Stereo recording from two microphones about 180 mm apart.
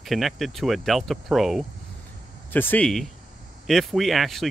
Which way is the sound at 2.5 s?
10° left (ahead or behind).